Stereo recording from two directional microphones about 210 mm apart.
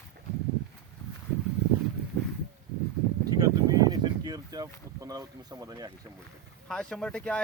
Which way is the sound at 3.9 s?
20° right (ahead or behind).